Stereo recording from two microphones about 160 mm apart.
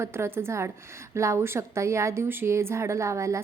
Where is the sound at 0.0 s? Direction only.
15° right (ahead or behind).